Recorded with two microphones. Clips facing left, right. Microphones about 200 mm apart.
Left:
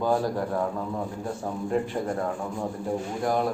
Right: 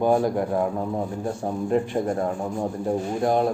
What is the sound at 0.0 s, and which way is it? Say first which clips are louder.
Speech: right 4 dB; 20° right (ahead or behind).